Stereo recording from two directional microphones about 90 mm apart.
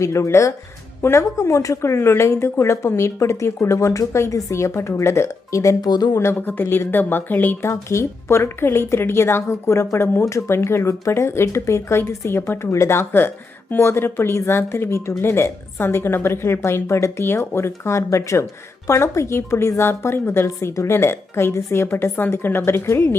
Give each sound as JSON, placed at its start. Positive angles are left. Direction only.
{"t": 0.0, "sound": "speech", "side_deg": 35}
{"t": 6.1, "sound": "a woman's voice", "side_deg": 25}
{"t": 7.7, "sound": "a woman's voice", "side_deg": 30}